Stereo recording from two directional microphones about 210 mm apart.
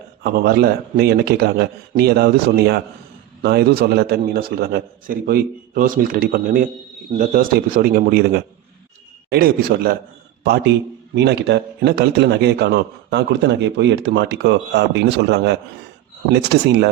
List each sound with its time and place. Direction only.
0.2 s a man's voice: 45° right (ahead or behind)